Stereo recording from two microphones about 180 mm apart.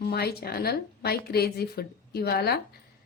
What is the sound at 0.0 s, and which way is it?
Speech, 60° left (ahead or behind).